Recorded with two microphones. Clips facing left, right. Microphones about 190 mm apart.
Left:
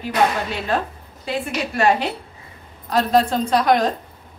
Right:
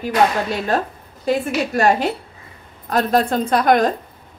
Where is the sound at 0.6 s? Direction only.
40° right (ahead or behind).